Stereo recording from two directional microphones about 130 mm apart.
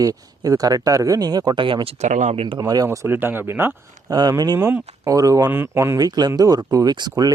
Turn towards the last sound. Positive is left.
turn(degrees=-30)  # may be behind; listen again after turning